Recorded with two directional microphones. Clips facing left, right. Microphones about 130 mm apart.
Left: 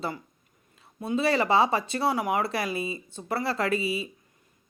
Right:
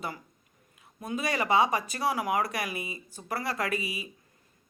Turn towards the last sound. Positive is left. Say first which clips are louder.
# left 5 dB
turn(degrees=30)  # may be behind; listen again after turning